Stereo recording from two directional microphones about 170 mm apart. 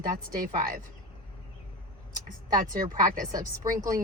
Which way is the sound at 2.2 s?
50° right (ahead or behind).